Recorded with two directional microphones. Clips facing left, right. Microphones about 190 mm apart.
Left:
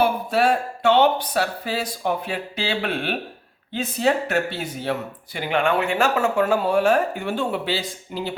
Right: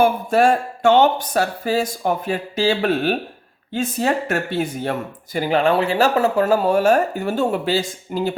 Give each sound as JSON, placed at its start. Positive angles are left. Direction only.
{"t": 0.0, "sound": "speech", "side_deg": -45}